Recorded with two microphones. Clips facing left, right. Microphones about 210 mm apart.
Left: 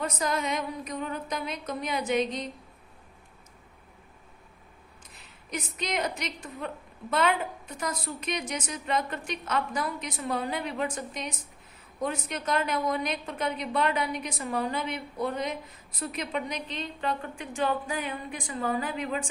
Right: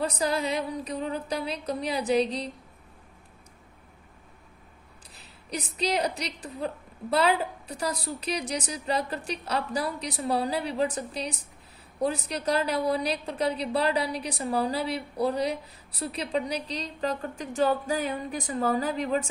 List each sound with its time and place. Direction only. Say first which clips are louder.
0.0 s a woman's voice: right 2 dB; 35° right (ahead or behind)
5.1 s a woman's voice: right 1 dB; 35° right (ahead or behind)